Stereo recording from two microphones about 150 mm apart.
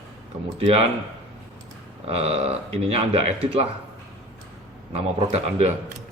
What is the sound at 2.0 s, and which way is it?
Speech, 40° right (ahead or behind).